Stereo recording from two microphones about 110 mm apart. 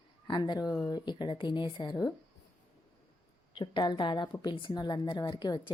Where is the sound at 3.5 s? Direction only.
45° left (ahead or behind).